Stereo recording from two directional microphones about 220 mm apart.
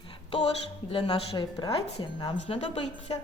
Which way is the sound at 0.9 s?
25° left (ahead or behind).